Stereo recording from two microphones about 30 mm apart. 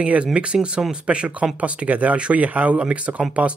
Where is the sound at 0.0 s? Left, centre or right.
Right.